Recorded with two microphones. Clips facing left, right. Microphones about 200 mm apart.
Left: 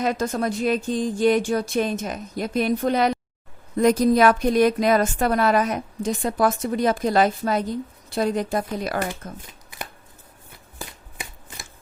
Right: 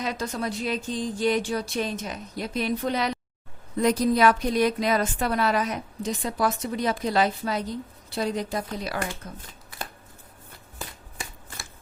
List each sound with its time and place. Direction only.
0.0 s a woman's voice: 50° left (ahead or behind)